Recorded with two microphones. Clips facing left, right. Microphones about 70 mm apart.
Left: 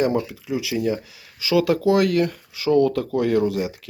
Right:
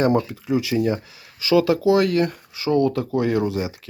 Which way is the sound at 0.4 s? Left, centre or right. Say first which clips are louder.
Right 3 dB; right.